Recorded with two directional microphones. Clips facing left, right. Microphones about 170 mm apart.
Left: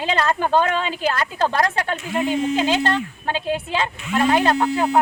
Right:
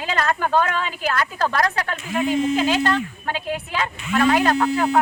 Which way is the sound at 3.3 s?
25° left (ahead or behind).